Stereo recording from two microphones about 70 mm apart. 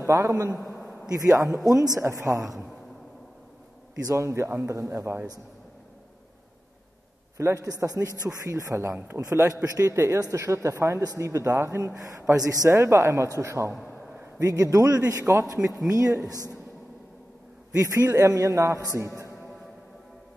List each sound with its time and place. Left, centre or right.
0.0 s a man's voice: right
0.7 s a sound: centre
1.6 s speech: right
2.0 s a man's voice: right
4.0 s a man's voice: right
7.3 s a man's voice: right
8.9 s a man's voice: right
9.2 s a man's voice: right
12.6 s a man's voice: right
17.8 s a man's voice: right